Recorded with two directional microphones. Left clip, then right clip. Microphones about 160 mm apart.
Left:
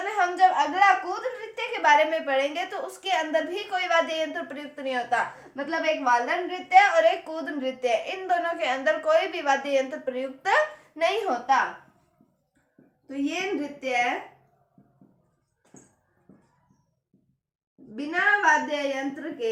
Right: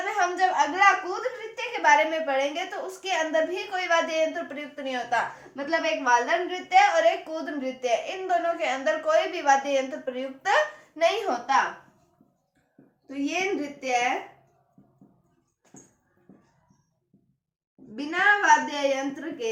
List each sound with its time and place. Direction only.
0.0 s a sound: 25° left (ahead or behind)
1.5 s a woman's voice: 40° left (ahead or behind); by 11.6 s 20° left (ahead or behind)
13.1 s a woman's voice: 20° left (ahead or behind)
17.9 s a woman's voice: 10° left (ahead or behind)